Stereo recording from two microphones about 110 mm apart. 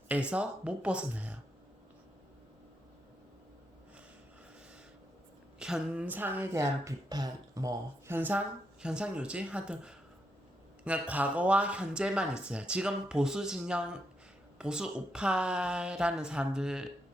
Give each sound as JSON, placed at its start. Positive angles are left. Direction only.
{"t": 0.1, "sound": "speech", "side_deg": -10}
{"t": 5.5, "sound": "speech", "side_deg": -5}
{"t": 6.5, "sound": "speech", "side_deg": -30}
{"t": 8.1, "sound": "speech", "side_deg": -15}